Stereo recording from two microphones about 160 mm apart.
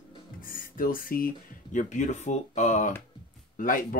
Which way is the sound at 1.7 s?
50° left (ahead or behind).